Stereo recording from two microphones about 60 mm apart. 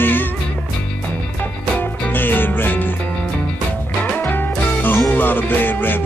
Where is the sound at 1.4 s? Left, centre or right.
Left.